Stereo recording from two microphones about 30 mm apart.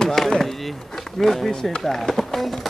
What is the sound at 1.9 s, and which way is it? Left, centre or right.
Run, centre.